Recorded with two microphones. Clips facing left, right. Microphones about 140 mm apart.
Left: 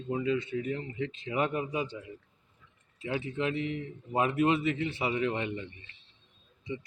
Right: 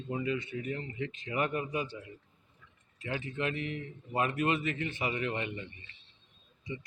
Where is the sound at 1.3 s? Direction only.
15° left (ahead or behind).